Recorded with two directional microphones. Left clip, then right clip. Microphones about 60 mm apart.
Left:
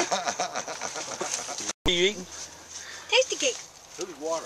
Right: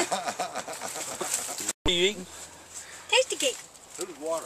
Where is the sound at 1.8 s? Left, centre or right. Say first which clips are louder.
Left 1 dB; centre.